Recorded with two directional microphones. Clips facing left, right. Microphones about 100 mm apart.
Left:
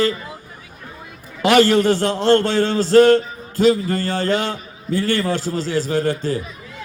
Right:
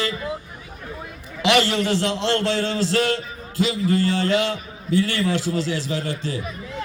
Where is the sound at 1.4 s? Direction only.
45° left (ahead or behind).